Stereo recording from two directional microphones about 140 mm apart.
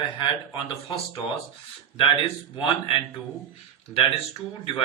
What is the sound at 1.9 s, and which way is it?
A man's voice, 40° left (ahead or behind).